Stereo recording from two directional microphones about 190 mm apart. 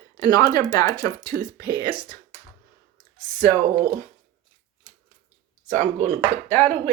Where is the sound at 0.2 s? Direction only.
20° left (ahead or behind).